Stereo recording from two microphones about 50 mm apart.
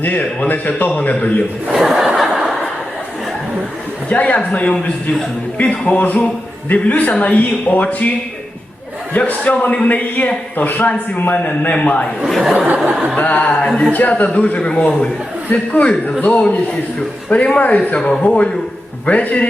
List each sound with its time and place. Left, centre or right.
0.0 s a man's voice: left
1.7 s chuckle: centre
4.1 s a man's voice: left
9.1 s a man's voice: left
12.3 s chuckle: centre
12.5 s a sound: right
13.1 s a man's voice: left
14.7 s a man's voice: centre
15.4 s a man's voice: left
17.2 s a man's voice: left